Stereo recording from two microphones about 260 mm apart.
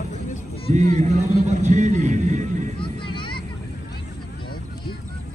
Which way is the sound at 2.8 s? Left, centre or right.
Centre.